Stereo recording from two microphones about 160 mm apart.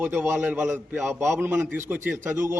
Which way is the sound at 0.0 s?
10° right (ahead or behind).